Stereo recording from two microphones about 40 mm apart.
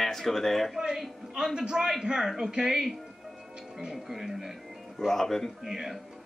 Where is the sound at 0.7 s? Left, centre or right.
Centre.